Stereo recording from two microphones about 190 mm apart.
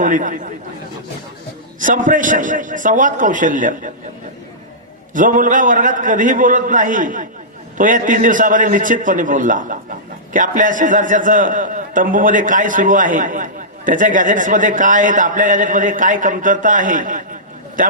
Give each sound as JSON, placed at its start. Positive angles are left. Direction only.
{"t": 0.0, "sound": "a man's voice", "side_deg": -45}
{"t": 1.8, "sound": "a man's voice", "side_deg": -45}
{"t": 5.1, "sound": "a man's voice", "side_deg": -45}